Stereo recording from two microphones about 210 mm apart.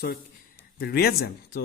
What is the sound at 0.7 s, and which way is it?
Speech, 45° left (ahead or behind).